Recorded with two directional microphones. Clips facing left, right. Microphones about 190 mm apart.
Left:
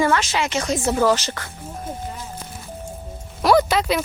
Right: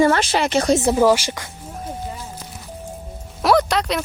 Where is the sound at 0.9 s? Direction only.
15° right (ahead or behind).